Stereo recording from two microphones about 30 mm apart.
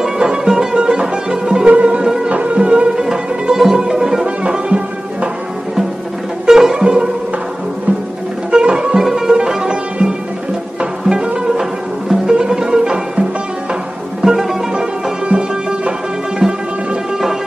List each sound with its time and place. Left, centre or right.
0.0 s music: centre
1.7 s music: right
2.2 s music: right
2.5 s music: right
3.0 s music: centre
4.4 s music: right
6.4 s music: centre
8.5 s music: right
8.9 s music: centre
10.8 s music: right
14.2 s music: centre
15.2 s music: right